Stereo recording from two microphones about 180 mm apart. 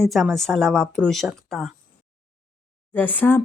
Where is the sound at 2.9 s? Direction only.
10° left (ahead or behind).